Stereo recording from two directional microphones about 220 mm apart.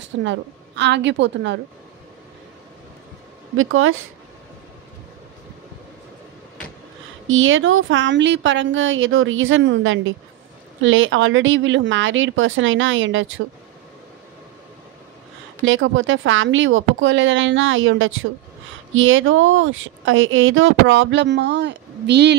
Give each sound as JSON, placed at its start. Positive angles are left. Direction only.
{"t": 0.2, "sound": "a woman's voice", "side_deg": -55}
{"t": 3.5, "sound": "speech", "side_deg": -65}
{"t": 7.2, "sound": "speech", "side_deg": -65}
{"t": 15.6, "sound": "speech", "side_deg": -60}